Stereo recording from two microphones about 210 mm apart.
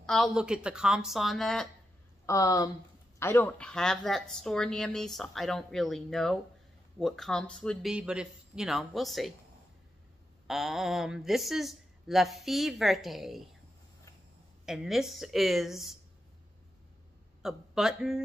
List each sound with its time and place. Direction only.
0.0 s a woman's voice: centre (ahead or behind)
2.2 s a woman's voice: 15° left (ahead or behind); by 9.3 s centre (ahead or behind)
10.4 s a woman's voice: centre (ahead or behind)
14.7 s a woman's voice: centre (ahead or behind)
17.4 s speech: centre (ahead or behind)